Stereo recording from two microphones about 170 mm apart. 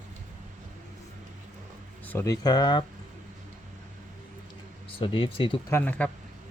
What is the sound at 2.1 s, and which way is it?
Speech, 15° left (ahead or behind).